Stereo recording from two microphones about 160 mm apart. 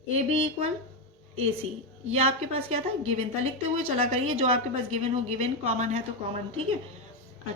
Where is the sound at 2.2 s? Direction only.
40° right (ahead or behind).